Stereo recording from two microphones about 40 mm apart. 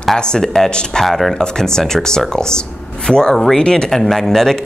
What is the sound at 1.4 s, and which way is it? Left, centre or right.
Speech, centre.